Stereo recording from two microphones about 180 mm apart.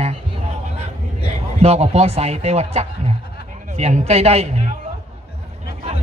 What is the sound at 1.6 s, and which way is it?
A man's voice, 35° right (ahead or behind).